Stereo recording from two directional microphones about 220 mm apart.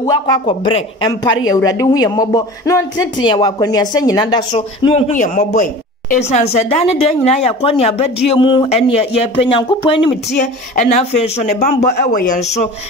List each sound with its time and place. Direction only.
0.0 s a man's voice: 20° left (ahead or behind)